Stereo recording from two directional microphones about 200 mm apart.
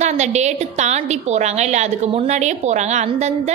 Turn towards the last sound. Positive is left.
turn(degrees=-35)  # may be behind; listen again after turning